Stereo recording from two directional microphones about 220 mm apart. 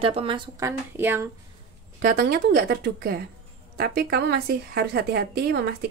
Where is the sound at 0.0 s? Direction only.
25° right (ahead or behind).